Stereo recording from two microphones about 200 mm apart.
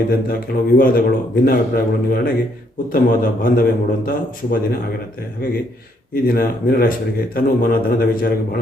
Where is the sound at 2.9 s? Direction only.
45° left (ahead or behind).